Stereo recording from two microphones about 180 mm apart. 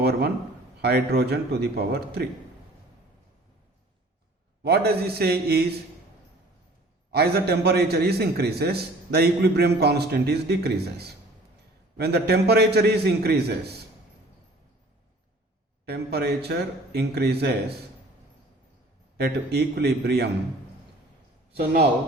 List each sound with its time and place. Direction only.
0.0 s a sound: 65° right (ahead or behind)
0.8 s a man's voice: 65° right (ahead or behind)
4.6 s a man's voice: 60° right (ahead or behind)
7.1 s a man's voice: 60° right (ahead or behind)
15.9 s a man's voice: 60° right (ahead or behind)
19.1 s a man's voice: 65° right (ahead or behind)
21.5 s a man's voice: 60° right (ahead or behind)